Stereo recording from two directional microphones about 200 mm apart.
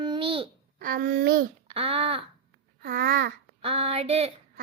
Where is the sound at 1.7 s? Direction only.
30° right (ahead or behind).